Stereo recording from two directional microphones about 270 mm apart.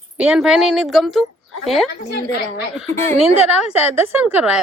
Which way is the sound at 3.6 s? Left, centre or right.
Centre.